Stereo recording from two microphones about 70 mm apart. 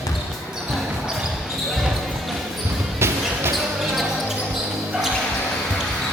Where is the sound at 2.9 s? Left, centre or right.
Right.